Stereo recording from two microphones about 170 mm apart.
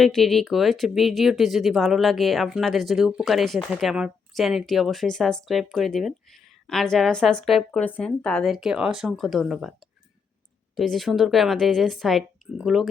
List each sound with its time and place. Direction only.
0.0 s speech: centre (ahead or behind)
10.8 s speech: centre (ahead or behind)